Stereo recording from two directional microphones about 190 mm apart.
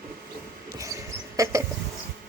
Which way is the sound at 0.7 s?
15° right (ahead or behind).